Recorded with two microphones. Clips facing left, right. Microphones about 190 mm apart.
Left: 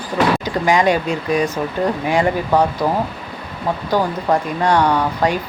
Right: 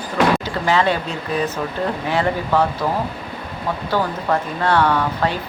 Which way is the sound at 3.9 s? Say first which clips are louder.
Left 3 dB; 15° left (ahead or behind).